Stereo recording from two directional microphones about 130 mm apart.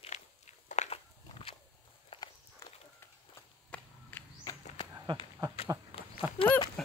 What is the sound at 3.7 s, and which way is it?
Whip, 10° left (ahead or behind).